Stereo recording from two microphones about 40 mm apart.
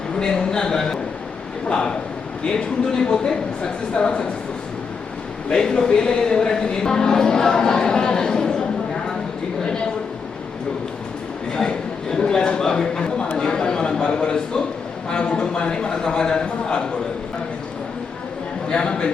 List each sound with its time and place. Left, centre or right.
0.2 s a man's voice: centre
2.5 s speech: centre
3.6 s a man's voice: left
5.5 s speech: centre
12.1 s a man's voice: centre
18.7 s a man's voice: left